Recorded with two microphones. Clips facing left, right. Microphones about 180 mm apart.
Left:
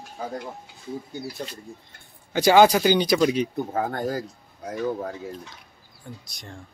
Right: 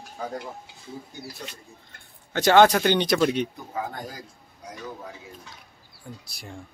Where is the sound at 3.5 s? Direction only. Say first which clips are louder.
Left 7 dB; 55° left (ahead or behind).